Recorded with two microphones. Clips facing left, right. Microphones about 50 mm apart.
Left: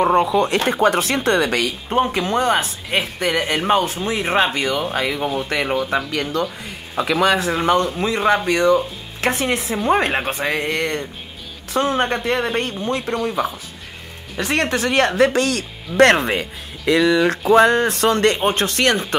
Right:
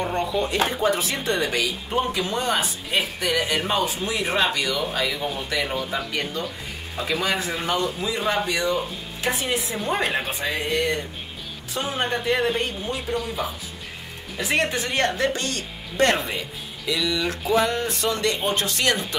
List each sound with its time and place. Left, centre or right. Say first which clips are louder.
0.0 s speech: left 9 dB; left
0.7 s speech: left 6 dB; left
2.0 s speech: left 6 dB; left
5.9 s speech: left 6 dB; left
7.0 s speech: left 8 dB; left
9.2 s speech: left 5 dB; left
10.4 s speech: left 3 dB; left
14.3 s speech: left 3 dB; left